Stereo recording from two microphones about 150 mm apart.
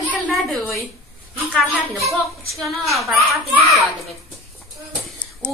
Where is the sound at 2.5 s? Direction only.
Centre (ahead or behind).